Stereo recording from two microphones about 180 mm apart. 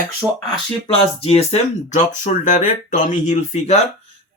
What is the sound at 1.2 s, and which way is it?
Speech, 35° left (ahead or behind).